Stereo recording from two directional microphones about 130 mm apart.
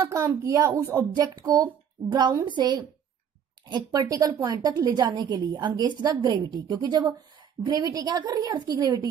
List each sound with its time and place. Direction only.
0.0 s a woman's voice: 25° right (ahead or behind)